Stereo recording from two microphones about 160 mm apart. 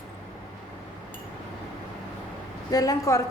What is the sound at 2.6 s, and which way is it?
Speech, 20° left (ahead or behind).